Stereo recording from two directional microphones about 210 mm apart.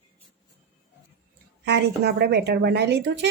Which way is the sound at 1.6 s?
50° right (ahead or behind).